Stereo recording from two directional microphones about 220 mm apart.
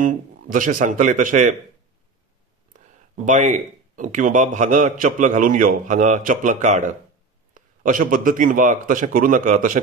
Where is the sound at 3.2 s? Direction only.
35° right (ahead or behind).